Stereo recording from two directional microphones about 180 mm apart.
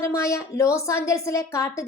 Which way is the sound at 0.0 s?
15° left (ahead or behind).